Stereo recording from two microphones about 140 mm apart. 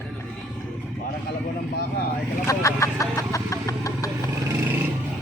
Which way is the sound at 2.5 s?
20° left (ahead or behind).